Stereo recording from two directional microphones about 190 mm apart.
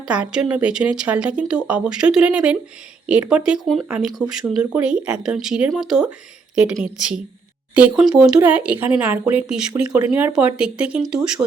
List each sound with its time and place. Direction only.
0.0 s speech: 5° right (ahead or behind)